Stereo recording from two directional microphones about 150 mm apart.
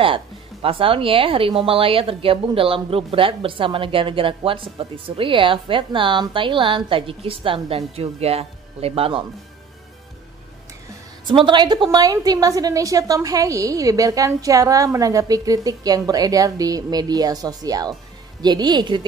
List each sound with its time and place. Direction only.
0.0 s speech: 35° right (ahead or behind)
11.2 s a woman's voice: 30° right (ahead or behind)